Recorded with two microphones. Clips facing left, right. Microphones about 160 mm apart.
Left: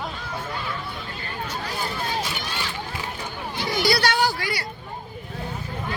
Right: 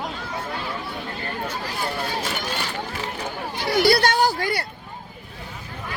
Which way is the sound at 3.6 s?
60° right (ahead or behind).